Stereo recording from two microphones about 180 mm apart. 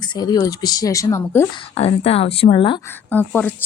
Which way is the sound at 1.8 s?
35° left (ahead or behind).